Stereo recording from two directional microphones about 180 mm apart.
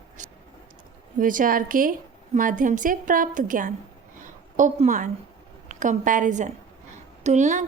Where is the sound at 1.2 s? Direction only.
50° right (ahead or behind).